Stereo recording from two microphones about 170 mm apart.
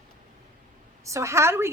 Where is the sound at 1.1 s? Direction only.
15° right (ahead or behind).